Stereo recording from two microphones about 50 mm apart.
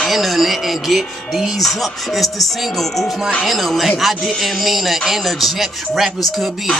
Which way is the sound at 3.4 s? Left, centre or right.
Centre.